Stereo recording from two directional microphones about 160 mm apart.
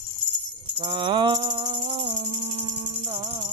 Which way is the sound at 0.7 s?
30° right (ahead or behind).